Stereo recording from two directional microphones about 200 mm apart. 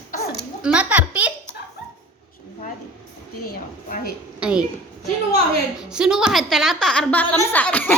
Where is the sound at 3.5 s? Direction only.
50° left (ahead or behind).